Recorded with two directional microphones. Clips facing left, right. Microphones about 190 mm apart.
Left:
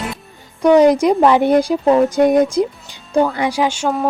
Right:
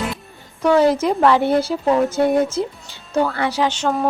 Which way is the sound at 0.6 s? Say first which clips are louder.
Left 5 dB; 15° left (ahead or behind).